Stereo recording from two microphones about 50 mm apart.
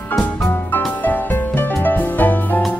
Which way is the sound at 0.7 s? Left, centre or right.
Left.